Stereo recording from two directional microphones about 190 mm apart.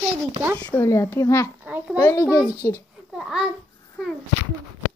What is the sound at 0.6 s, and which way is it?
Child singing, 10° left (ahead or behind).